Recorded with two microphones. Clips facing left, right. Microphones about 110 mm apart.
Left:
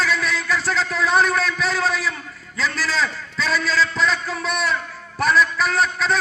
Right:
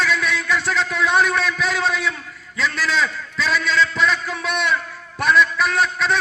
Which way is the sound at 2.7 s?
35° left (ahead or behind).